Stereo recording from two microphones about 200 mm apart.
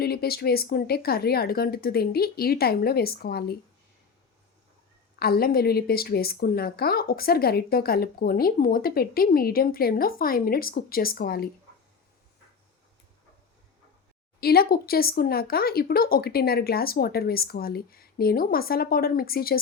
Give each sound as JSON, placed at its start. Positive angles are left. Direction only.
{"t": 0.0, "sound": "a woman's voice", "side_deg": 50}
{"t": 5.2, "sound": "a woman's voice", "side_deg": 50}
{"t": 14.4, "sound": "a woman's voice", "side_deg": 50}